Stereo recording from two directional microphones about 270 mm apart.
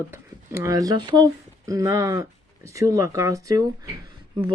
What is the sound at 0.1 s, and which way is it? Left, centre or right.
Speech, centre.